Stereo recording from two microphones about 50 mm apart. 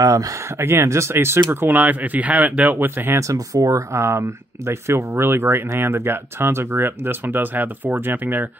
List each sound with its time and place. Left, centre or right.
0.6 s speech: right
0.8 s speech: right
1.1 s speech: right
1.7 s speech: right
3.2 s speech: right